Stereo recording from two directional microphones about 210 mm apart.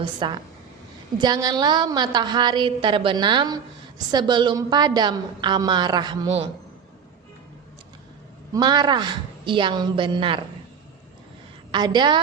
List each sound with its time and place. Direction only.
0.0 s a woman's voice: 20° right (ahead or behind)
8.5 s a woman's voice: 20° right (ahead or behind)
11.7 s a woman's voice: 20° right (ahead or behind)